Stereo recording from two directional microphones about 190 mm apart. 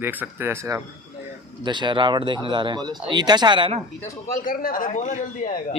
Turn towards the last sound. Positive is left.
turn(degrees=45)  # may be behind; listen again after turning